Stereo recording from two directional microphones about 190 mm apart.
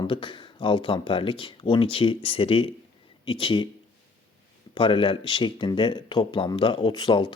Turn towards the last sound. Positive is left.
turn(degrees=25)  # may be behind; listen again after turning